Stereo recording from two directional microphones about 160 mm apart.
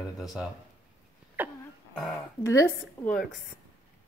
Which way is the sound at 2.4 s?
20° left (ahead or behind).